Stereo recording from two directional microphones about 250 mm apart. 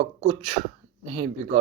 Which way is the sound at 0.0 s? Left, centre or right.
Right.